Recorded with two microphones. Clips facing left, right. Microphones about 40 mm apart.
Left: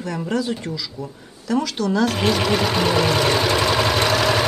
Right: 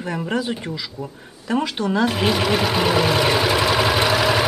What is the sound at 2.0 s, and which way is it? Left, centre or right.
Sewing machine, centre.